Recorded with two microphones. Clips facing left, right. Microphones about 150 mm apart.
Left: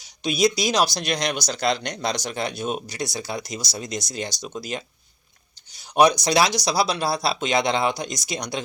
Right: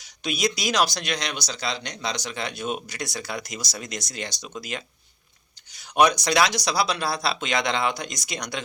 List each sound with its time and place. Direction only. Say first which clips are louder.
0.0 s speech: left 5 dB; 30° left (ahead or behind)
5.7 s speech: left 2 dB; 35° left (ahead or behind)